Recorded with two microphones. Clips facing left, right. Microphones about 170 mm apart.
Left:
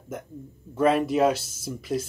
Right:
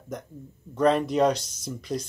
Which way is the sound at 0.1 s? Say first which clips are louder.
Even; 5° left (ahead or behind).